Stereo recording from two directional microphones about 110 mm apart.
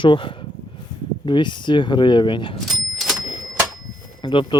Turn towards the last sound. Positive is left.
turn(degrees=45)  # may be behind; listen again after turning